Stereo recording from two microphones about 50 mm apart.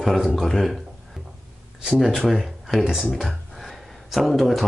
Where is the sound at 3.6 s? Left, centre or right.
Centre.